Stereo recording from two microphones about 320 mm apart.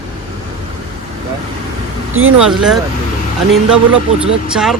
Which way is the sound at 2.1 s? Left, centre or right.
Right.